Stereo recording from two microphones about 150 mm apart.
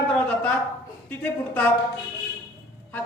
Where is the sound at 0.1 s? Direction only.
10° left (ahead or behind).